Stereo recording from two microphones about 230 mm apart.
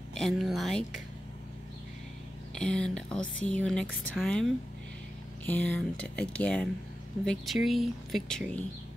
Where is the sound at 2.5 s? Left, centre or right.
Centre.